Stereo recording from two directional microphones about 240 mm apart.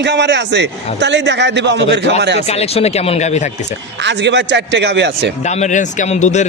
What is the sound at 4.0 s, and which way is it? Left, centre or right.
A man's voice, right.